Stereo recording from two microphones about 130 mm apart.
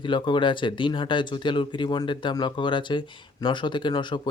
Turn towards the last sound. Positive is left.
turn(degrees=35)  # may be behind; listen again after turning